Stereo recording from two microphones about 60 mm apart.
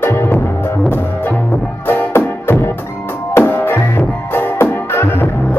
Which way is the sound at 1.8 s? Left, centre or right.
Left.